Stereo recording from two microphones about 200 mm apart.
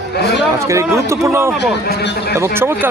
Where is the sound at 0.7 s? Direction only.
15° right (ahead or behind).